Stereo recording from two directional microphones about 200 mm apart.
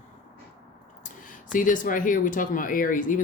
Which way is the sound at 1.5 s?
40° left (ahead or behind).